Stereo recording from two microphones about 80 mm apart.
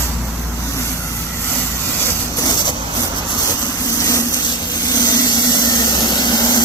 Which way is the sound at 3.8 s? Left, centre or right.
Left.